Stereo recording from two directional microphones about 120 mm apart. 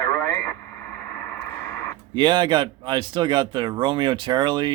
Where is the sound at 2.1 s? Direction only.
40° right (ahead or behind).